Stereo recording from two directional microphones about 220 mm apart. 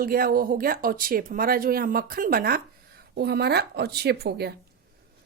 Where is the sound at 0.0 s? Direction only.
40° right (ahead or behind).